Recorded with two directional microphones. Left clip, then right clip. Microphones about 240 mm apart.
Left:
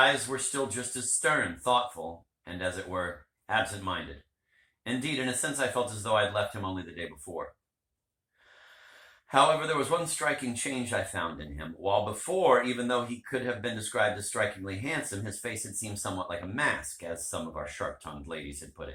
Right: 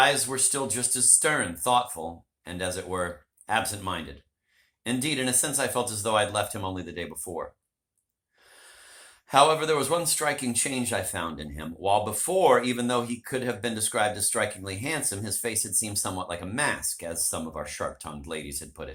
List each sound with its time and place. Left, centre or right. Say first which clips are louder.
0.3 s speech: right 3 dB; right
9.2 s speech: right 3 dB; right